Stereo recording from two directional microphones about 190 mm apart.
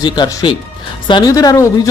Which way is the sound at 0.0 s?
20° left (ahead or behind).